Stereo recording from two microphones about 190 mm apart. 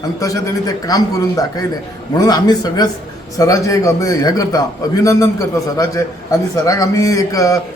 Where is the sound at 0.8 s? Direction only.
20° left (ahead or behind).